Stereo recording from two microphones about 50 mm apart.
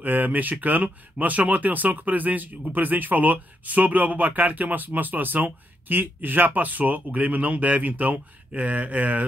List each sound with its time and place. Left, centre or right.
0.0 s speech: right